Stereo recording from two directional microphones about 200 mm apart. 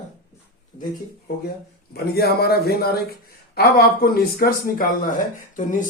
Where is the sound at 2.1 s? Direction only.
50° left (ahead or behind).